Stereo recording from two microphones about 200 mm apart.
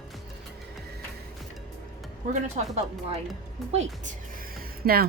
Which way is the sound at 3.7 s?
35° right (ahead or behind).